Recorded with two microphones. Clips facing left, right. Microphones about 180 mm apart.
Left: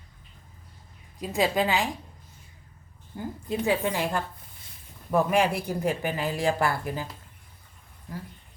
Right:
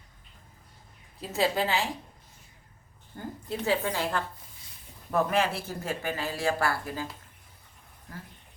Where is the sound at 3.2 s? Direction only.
15° left (ahead or behind).